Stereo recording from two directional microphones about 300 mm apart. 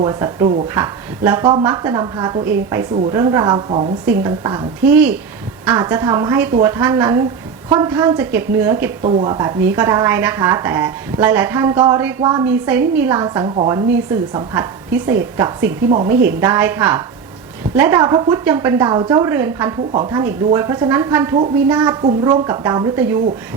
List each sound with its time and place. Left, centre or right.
0.0 s a woman's voice: centre